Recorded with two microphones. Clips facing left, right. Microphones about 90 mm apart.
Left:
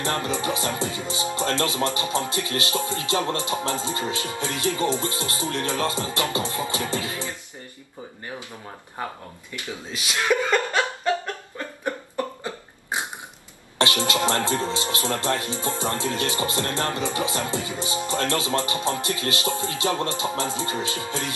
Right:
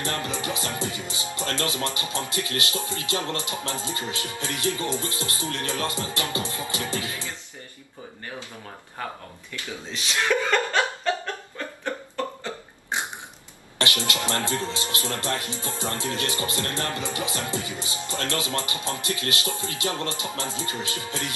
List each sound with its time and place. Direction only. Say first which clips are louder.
0.0 s speech: left 4 dB; 25° left (ahead or behind)
9.0 s speech: left 2 dB; 20° left (ahead or behind)
11.5 s burping: left 3 dB; 15° left (ahead or behind)
13.7 s speech: left 5 dB; 25° left (ahead or behind)